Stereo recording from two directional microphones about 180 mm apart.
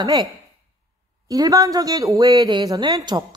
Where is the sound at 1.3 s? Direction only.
20° right (ahead or behind).